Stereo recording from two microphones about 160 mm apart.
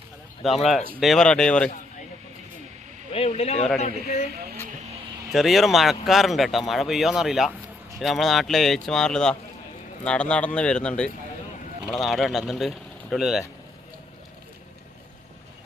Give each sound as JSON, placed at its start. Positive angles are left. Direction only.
{"t": 0.4, "sound": "speech", "side_deg": 0}
{"t": 3.1, "sound": "speech", "side_deg": 40}
{"t": 3.8, "sound": "a man's voice", "side_deg": 60}
{"t": 5.3, "sound": "a man's voice", "side_deg": 0}